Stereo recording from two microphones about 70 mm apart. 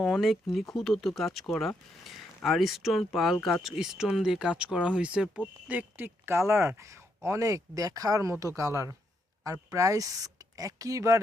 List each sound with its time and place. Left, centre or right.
0.0 s speech: centre; by 6.1 s right
6.5 s speech: right
7.2 s speech: right